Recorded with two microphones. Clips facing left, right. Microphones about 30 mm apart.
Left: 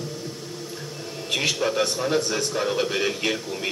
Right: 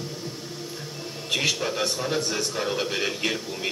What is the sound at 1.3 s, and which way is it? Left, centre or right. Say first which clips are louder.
A man's voice: left 2 dB; centre.